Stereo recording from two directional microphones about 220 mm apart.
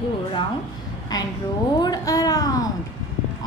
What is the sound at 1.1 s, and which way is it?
Speech, 15° left (ahead or behind).